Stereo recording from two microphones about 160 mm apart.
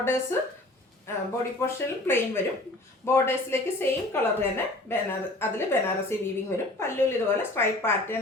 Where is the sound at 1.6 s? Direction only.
15° left (ahead or behind).